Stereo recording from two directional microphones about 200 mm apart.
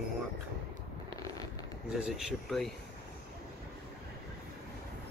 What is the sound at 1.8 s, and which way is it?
Speech, 5° right (ahead or behind).